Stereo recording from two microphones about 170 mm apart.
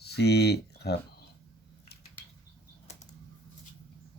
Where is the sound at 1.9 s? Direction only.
70° left (ahead or behind).